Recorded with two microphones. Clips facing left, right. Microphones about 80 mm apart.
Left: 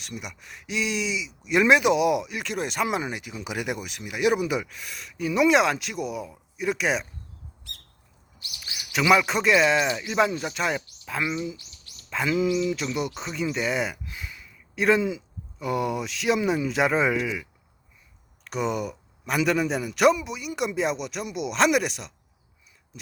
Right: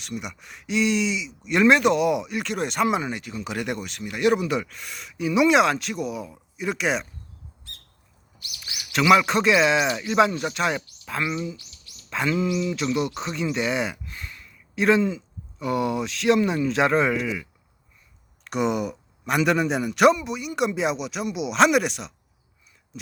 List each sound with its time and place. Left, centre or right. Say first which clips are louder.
0.0 s speech: right 4 dB; centre
8.4 s speech: even; left
8.9 s speech: right 3 dB; centre